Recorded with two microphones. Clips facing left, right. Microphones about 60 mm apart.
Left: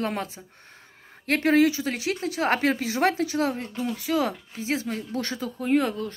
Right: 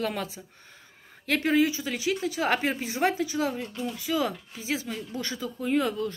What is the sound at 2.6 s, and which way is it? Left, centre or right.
Speech, left.